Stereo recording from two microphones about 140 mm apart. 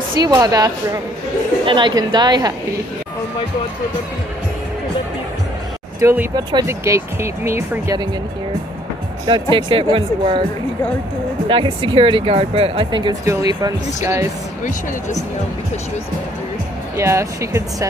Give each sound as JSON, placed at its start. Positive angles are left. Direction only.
{"t": 0.2, "sound": "speech", "side_deg": -30}
{"t": 1.7, "sound": "speech", "side_deg": -35}
{"t": 5.9, "sound": "speech", "side_deg": -20}
{"t": 9.2, "sound": "speech", "side_deg": -30}
{"t": 11.4, "sound": "speech", "side_deg": -35}
{"t": 13.2, "sound": "speech", "side_deg": -25}
{"t": 16.9, "sound": "speech", "side_deg": -20}